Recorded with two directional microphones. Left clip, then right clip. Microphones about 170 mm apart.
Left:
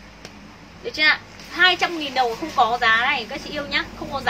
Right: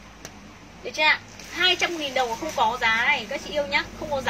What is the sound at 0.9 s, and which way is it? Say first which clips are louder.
A child's voice: left 3 dB; 20° left (ahead or behind).